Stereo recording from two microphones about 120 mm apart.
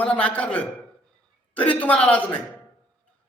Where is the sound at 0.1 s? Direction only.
10° left (ahead or behind).